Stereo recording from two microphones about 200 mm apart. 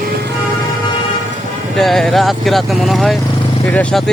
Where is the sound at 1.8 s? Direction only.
Centre (ahead or behind).